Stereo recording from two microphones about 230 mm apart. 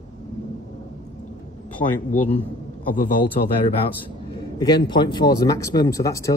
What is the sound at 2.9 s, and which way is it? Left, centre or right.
Speech, left.